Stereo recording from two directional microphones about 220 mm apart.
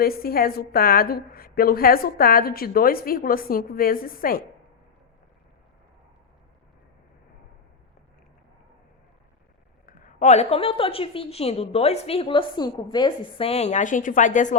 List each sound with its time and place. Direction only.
0.0 s a woman's voice: 45° left (ahead or behind)
9.8 s a woman's voice: 35° left (ahead or behind)